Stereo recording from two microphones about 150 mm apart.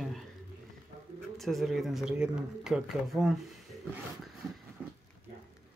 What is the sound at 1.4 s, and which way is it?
Speech, centre (ahead or behind).